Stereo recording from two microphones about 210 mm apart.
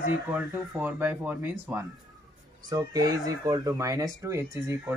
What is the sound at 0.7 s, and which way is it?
Speech, 10° right (ahead or behind).